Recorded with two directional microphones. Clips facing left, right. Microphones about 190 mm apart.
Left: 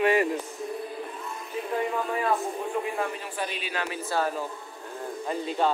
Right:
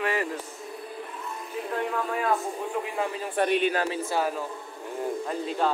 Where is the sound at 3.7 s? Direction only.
35° right (ahead or behind).